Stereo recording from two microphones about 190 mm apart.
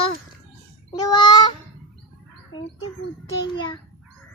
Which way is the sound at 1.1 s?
20° left (ahead or behind).